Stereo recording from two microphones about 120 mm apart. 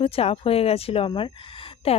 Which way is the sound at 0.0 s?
55° left (ahead or behind).